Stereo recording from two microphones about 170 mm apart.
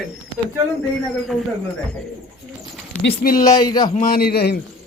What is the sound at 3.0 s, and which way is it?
A man's voice, 60° left (ahead or behind).